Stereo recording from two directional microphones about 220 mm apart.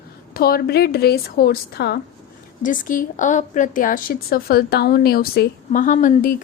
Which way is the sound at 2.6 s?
35° left (ahead or behind).